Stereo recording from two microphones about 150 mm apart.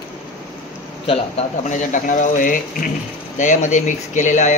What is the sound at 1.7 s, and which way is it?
Speech, 60° left (ahead or behind).